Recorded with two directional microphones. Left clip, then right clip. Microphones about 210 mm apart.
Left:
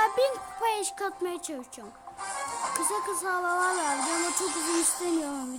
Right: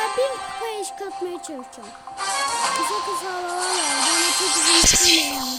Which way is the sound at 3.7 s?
40° right (ahead or behind).